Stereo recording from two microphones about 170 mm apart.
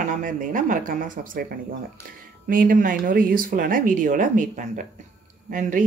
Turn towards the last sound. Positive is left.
turn(degrees=-50)  # may be behind; listen again after turning